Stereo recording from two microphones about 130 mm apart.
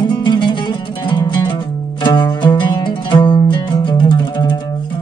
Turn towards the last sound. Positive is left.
turn(degrees=30)  # may be behind; listen again after turning